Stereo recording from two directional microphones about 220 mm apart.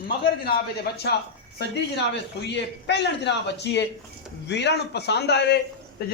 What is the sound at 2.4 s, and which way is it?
A man's voice, 50° left (ahead or behind).